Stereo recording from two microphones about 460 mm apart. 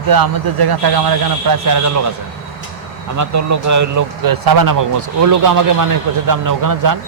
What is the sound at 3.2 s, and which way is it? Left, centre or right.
Speech, right.